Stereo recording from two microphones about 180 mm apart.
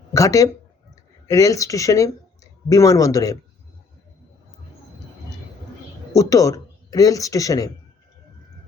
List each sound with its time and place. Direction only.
0.1 s speech: 20° left (ahead or behind)
6.1 s speech: 20° left (ahead or behind)